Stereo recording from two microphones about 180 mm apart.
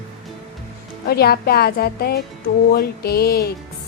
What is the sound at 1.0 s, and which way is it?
A woman's voice, 60° left (ahead or behind).